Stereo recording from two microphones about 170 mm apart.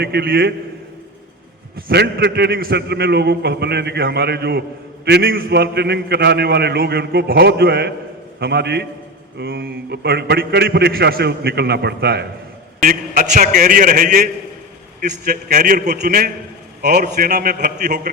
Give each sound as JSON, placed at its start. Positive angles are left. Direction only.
{"t": 0.0, "sound": "a man's voice", "side_deg": -65}
{"t": 1.7, "sound": "a man's voice", "side_deg": -70}
{"t": 12.8, "sound": "a man's voice", "side_deg": -55}